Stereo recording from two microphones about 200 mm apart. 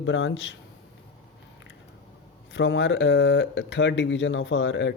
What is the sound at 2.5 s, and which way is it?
Speech, 65° left (ahead or behind).